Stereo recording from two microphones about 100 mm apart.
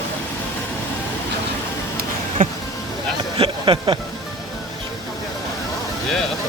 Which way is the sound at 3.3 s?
50° right (ahead or behind).